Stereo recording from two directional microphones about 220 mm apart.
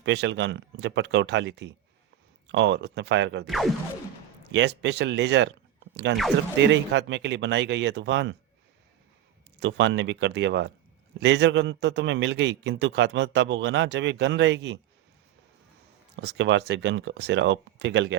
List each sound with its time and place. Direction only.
0.0 s a man's voice: 55° right (ahead or behind)
3.4 s speech: centre (ahead or behind)
4.5 s a man's voice: 50° right (ahead or behind)
9.6 s a man's voice: 55° right (ahead or behind)
16.1 s a man's voice: 55° right (ahead or behind)